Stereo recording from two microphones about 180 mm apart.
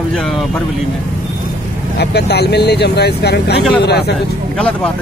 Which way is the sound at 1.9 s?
65° left (ahead or behind).